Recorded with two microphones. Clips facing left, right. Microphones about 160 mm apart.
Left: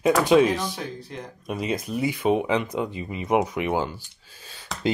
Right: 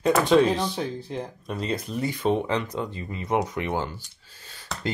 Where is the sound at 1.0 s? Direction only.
30° right (ahead or behind).